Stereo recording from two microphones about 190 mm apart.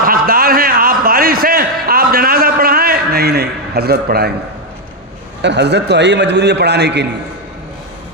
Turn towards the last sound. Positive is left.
turn(degrees=-65)  # may be behind; listen again after turning